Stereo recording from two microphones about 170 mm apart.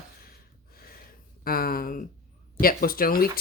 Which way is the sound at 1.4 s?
60° left (ahead or behind).